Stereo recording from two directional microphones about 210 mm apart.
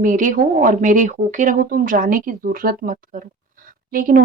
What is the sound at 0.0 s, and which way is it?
Speech, 40° right (ahead or behind).